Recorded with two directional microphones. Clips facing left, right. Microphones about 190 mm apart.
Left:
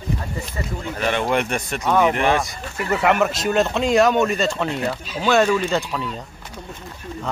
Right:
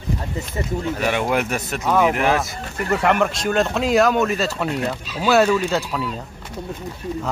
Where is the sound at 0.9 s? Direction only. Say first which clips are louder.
Left 1 dB; 10° right (ahead or behind).